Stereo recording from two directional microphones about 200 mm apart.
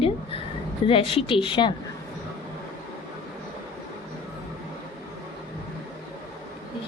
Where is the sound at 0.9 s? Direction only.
25° left (ahead or behind).